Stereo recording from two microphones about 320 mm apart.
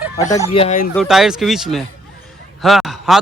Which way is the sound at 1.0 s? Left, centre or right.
Centre.